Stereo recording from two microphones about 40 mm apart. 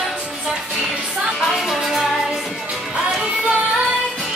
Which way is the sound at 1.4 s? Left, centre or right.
Centre.